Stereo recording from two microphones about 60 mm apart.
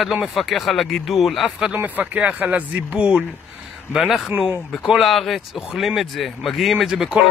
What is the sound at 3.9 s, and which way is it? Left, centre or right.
Speech, centre.